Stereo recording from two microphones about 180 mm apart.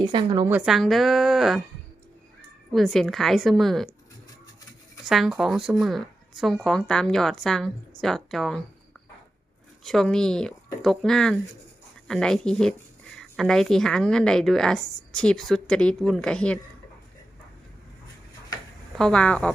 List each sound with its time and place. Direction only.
0.1 s a woman's voice: 25° right (ahead or behind)
0.4 s speech: 5° right (ahead or behind)
2.7 s speech: centre (ahead or behind)
5.0 s speech: centre (ahead or behind)
9.8 s speech: centre (ahead or behind)
18.9 s speech: 5° left (ahead or behind)